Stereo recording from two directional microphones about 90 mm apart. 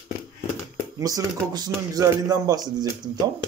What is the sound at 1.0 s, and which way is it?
Speech, 40° right (ahead or behind).